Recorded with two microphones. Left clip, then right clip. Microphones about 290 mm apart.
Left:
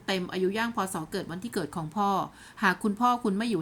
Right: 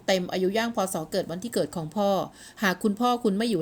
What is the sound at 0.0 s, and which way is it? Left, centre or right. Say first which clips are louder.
A woman's voice: right 4 dB; centre.